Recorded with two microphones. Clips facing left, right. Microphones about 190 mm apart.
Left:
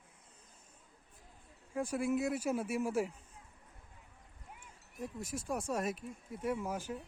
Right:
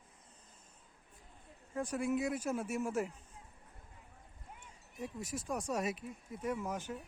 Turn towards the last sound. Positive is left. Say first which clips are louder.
# left 1 dB
turn(degrees=0)  # may be behind; listen again after turning